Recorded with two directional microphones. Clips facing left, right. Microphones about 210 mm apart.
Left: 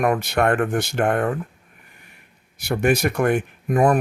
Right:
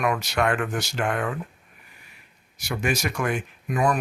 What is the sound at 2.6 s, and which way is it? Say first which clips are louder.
Speech: left 7 dB; 60° left (ahead or behind).